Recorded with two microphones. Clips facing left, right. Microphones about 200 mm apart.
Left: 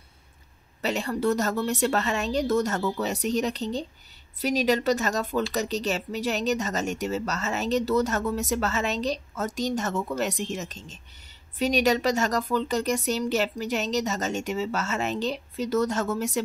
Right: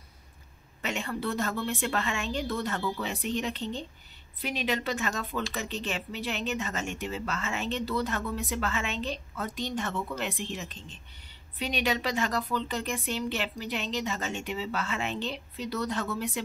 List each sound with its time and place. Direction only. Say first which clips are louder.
0.8 s speech: left 7 dB; 40° left (ahead or behind)